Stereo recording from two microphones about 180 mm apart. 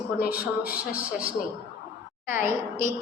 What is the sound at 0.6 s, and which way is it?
A woman's voice, 5° right (ahead or behind).